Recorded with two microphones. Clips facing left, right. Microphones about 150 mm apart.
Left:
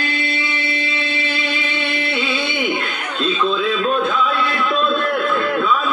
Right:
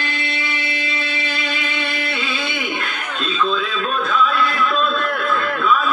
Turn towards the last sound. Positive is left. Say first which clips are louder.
# left 1 dB
turn(degrees=30)  # may be behind; listen again after turning